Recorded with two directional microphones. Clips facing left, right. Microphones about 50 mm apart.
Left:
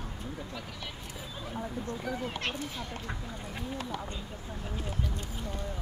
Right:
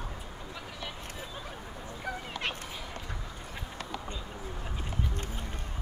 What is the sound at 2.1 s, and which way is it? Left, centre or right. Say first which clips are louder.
Speech: right 1 dB; centre.